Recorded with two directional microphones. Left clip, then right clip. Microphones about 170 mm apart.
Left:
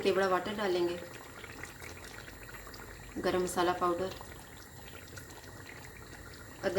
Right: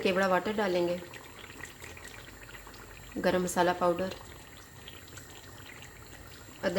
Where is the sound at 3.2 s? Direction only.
50° right (ahead or behind).